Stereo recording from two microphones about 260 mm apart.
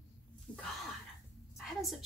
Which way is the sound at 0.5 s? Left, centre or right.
Centre.